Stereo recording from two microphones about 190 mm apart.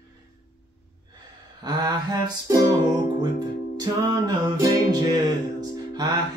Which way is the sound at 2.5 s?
20° right (ahead or behind).